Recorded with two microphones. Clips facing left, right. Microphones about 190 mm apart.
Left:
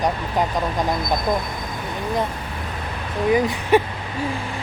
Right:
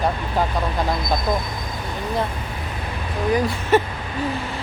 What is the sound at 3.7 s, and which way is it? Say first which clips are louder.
Speech: left 1 dB; 15° left (ahead or behind).